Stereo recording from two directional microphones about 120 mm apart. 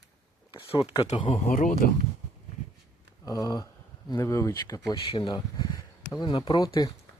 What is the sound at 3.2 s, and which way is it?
Speech, 30° left (ahead or behind).